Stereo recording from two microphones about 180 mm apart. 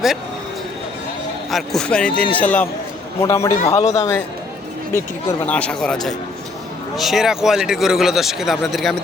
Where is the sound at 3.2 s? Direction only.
15° left (ahead or behind).